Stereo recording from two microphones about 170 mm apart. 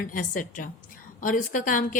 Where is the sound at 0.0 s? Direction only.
50° left (ahead or behind).